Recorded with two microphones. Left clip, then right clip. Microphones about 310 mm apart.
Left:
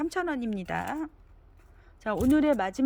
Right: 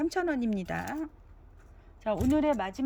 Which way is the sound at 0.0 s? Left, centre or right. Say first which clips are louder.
Even; centre.